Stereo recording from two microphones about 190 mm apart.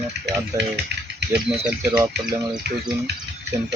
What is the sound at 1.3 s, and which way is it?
Speech, 5° right (ahead or behind).